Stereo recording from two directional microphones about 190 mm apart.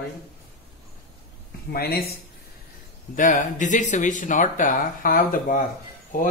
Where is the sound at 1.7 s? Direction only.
55° left (ahead or behind).